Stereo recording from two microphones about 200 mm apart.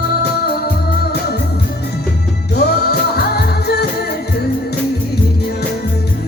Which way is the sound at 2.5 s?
50° left (ahead or behind).